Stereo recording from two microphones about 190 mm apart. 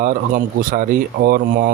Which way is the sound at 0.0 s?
45° right (ahead or behind).